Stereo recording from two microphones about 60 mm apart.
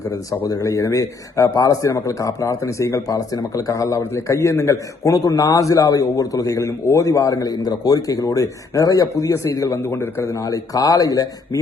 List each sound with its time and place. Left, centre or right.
0.3 s a man's voice: left
6.6 s speech: left
6.9 s a man's voice: left
9.7 s a man's voice: left
10.3 s speech: left